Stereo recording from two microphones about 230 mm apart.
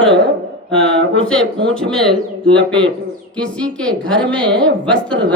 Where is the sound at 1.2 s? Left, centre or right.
Centre.